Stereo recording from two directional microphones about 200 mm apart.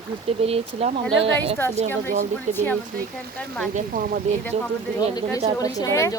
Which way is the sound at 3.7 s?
45° right (ahead or behind).